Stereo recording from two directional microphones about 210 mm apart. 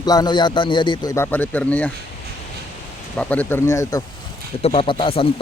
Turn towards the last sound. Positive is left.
turn(degrees=25)  # may be behind; listen again after turning